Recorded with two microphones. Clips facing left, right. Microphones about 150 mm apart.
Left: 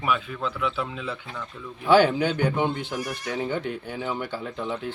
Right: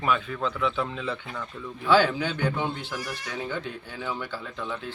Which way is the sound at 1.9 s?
15° left (ahead or behind).